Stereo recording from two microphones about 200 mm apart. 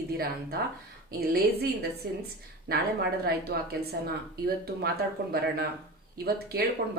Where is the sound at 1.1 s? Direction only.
50° right (ahead or behind).